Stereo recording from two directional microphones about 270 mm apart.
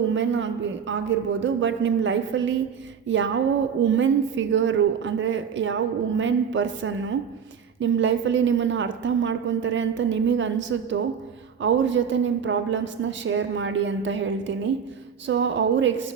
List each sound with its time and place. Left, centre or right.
0.1 s a woman's voice: right
3.8 s a woman's voice: right